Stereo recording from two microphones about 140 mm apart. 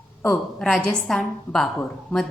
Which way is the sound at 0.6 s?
5° left (ahead or behind).